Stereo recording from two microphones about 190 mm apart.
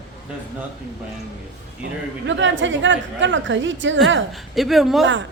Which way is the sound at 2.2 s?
75° right (ahead or behind).